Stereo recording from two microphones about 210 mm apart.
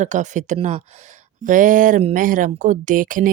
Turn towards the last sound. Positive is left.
turn(degrees=-40)  # may be behind; listen again after turning